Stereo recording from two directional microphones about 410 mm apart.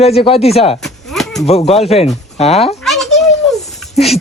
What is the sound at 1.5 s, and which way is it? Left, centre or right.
Speech, centre.